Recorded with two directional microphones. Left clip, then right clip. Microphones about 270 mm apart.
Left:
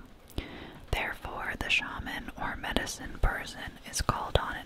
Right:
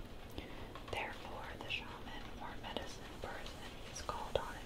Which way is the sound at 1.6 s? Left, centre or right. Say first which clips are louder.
Left 16 dB; left.